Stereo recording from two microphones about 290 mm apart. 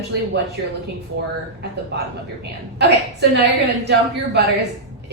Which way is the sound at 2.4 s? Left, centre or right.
Right.